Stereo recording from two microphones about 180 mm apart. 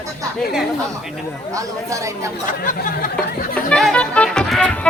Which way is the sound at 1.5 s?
15° right (ahead or behind).